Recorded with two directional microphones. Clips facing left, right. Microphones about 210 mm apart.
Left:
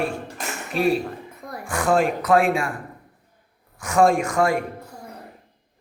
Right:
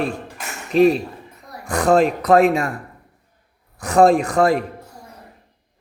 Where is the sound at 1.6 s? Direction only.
40° right (ahead or behind).